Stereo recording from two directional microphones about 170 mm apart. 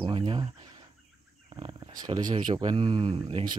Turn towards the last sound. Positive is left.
turn(degrees=-35)  # may be behind; listen again after turning